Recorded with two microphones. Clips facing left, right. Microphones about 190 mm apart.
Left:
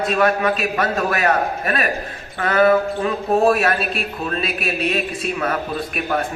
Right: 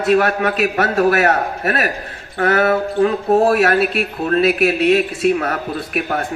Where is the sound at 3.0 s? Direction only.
65° right (ahead or behind).